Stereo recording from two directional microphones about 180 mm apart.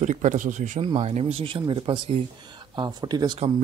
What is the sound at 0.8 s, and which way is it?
Speech, 30° right (ahead or behind).